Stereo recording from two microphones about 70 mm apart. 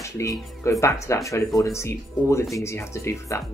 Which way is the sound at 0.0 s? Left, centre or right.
Left.